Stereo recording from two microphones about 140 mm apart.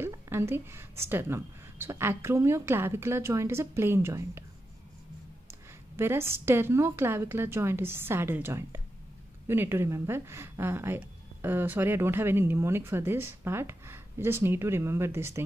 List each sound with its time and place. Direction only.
0.0 s a woman's voice: 20° right (ahead or behind)
5.5 s a woman's voice: 15° right (ahead or behind)